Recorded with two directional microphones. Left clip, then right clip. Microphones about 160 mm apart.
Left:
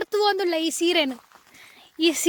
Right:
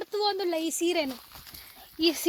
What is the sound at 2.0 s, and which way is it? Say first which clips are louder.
Speech: left 4 dB; 45° left (ahead or behind).